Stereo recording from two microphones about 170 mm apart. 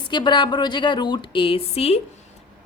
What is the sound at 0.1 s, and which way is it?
A woman's voice, 25° left (ahead or behind).